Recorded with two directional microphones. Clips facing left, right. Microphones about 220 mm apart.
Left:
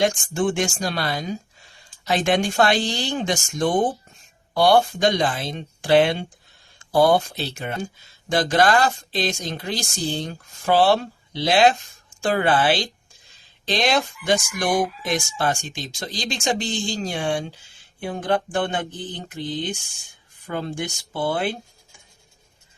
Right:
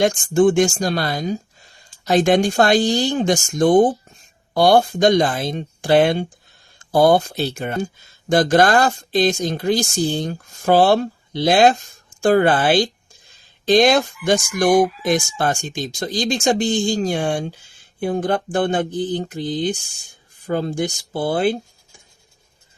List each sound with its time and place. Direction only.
0.0 s speech: 40° right (ahead or behind)